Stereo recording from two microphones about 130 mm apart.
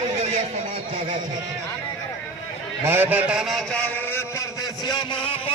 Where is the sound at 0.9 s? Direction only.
40° right (ahead or behind).